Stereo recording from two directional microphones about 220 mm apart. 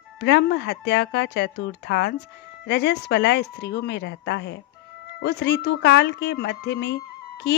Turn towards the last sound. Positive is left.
turn(degrees=50)  # may be behind; listen again after turning